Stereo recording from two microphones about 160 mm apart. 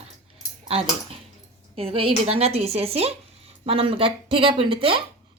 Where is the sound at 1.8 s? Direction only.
35° right (ahead or behind).